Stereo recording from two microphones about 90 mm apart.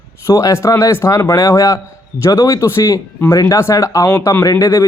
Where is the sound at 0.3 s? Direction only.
35° left (ahead or behind).